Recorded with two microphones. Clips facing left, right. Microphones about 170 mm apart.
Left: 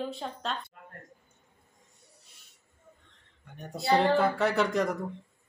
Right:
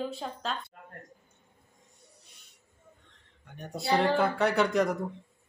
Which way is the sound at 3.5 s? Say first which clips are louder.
Left 2 dB; centre (ahead or behind).